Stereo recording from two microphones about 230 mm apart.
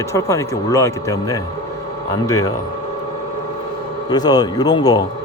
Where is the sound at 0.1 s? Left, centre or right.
Centre.